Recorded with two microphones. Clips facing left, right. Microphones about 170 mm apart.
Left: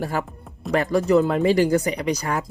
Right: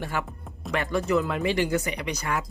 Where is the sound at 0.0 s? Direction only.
35° left (ahead or behind).